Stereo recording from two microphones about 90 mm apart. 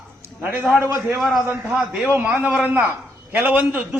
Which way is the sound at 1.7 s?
15° right (ahead or behind).